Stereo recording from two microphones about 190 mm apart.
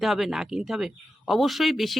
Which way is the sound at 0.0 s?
Centre (ahead or behind).